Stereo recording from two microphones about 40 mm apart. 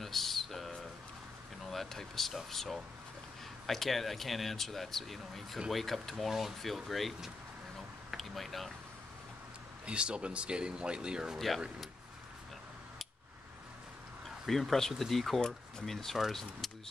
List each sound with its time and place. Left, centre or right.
0.0 s a sound: centre
2.5 s speech: centre
8.2 s speech: centre
9.8 s speech: right
11.3 s speech: centre
14.5 s speech: centre